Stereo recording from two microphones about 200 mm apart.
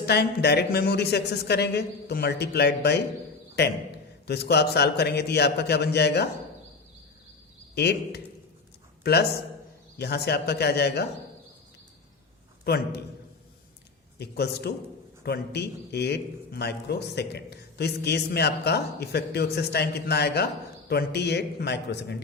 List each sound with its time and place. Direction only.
0.0 s a man's voice: 55° left (ahead or behind)
7.8 s a man's voice: 55° left (ahead or behind)
12.6 s a man's voice: 55° left (ahead or behind)
14.2 s a man's voice: 55° left (ahead or behind)